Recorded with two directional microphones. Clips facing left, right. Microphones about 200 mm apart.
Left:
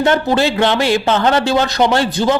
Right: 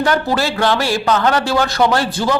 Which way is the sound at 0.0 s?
25° left (ahead or behind).